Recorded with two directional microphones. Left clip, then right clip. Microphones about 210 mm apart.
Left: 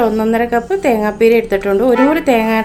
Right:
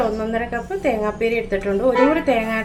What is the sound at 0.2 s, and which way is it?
A woman's voice, 55° left (ahead or behind).